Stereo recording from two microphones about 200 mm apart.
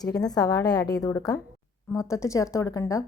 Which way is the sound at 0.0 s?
20° left (ahead or behind).